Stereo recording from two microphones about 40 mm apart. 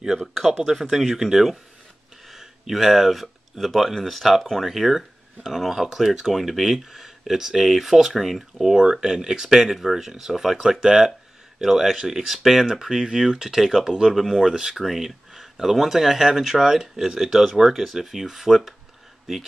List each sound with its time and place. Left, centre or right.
0.6 s speech: centre
8.7 s speech: centre
10.6 s speech: centre
12.3 s speech: centre
14.5 s speech: centre
14.8 s speech: centre